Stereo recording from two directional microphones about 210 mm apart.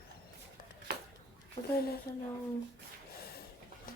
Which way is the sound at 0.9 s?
50° right (ahead or behind).